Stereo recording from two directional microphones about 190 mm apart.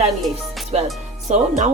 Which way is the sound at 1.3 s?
40° right (ahead or behind).